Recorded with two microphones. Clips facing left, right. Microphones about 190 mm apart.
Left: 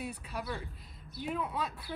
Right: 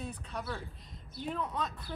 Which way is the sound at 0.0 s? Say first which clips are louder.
Left 1 dB; 10° left (ahead or behind).